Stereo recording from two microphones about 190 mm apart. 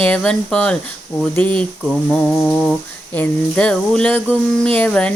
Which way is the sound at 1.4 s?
5° left (ahead or behind).